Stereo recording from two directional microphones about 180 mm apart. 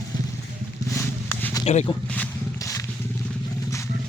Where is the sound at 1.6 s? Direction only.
40° left (ahead or behind).